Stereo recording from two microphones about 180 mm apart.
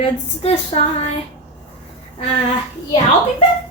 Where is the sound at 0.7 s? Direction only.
30° left (ahead or behind).